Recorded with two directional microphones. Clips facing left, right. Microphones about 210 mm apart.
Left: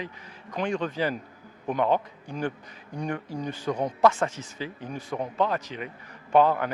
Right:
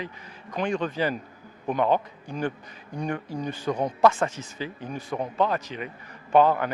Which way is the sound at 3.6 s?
25° right (ahead or behind).